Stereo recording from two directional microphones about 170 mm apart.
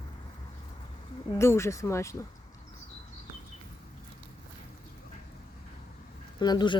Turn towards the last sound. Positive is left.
turn(degrees=25)  # may be behind; listen again after turning